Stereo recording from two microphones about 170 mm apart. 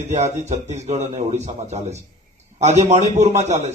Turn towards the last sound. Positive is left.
turn(degrees=-40)  # may be behind; listen again after turning